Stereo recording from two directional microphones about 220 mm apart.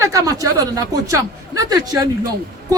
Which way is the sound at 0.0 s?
15° right (ahead or behind).